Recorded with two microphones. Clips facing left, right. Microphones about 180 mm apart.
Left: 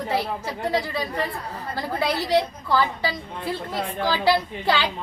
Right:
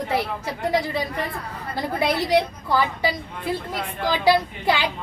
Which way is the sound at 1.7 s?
20° right (ahead or behind).